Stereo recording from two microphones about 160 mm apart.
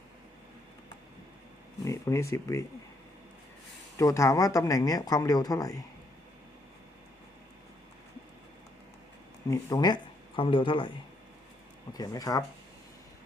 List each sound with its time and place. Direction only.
1.8 s speech: 20° left (ahead or behind)
3.9 s speech: 20° left (ahead or behind)
9.5 s speech: 25° left (ahead or behind)
11.9 s speech: 25° left (ahead or behind)